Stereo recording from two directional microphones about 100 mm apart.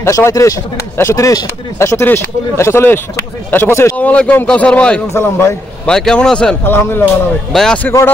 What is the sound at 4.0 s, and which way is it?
Speech, 15° left (ahead or behind).